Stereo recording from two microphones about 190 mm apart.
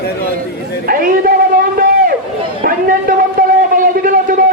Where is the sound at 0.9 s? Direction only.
50° right (ahead or behind).